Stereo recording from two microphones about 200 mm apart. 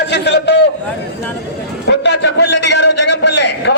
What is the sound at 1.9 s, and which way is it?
A man's voice, 60° left (ahead or behind).